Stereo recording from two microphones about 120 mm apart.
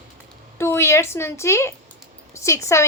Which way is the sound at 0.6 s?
20° left (ahead or behind).